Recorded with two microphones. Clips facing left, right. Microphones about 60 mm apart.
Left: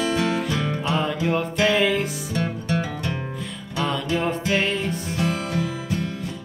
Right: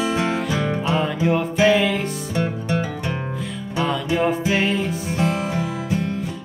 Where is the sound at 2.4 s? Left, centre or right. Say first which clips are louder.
Right 2 dB; centre.